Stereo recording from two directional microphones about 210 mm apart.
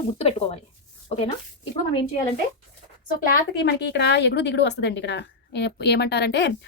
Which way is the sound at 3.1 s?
50° left (ahead or behind).